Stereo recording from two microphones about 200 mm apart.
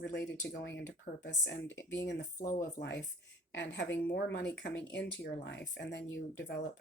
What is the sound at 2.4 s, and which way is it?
Speech, 40° left (ahead or behind).